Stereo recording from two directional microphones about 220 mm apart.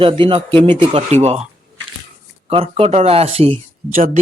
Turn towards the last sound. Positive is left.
turn(degrees=-40)  # may be behind; listen again after turning